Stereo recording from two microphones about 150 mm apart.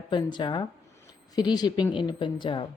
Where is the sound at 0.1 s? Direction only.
30° left (ahead or behind).